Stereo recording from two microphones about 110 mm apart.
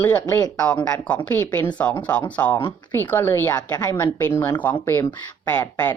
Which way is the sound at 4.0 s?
20° left (ahead or behind).